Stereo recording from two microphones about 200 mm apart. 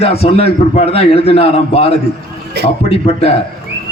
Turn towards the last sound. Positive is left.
turn(degrees=30)  # may be behind; listen again after turning